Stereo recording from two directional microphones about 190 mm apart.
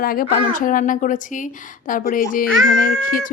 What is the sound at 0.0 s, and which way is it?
A woman's voice, 50° left (ahead or behind).